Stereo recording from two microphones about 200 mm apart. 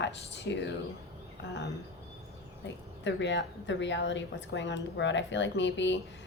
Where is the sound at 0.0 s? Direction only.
60° left (ahead or behind).